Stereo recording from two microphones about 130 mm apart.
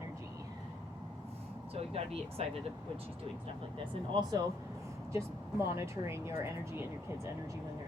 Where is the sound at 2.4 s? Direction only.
50° right (ahead or behind).